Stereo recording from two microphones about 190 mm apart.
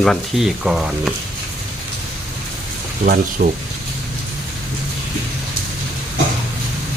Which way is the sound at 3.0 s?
50° right (ahead or behind).